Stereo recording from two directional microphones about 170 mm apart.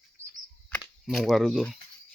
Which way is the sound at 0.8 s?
Centre (ahead or behind).